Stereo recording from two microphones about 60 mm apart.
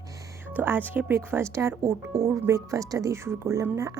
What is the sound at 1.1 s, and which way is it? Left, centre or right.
Speech, right.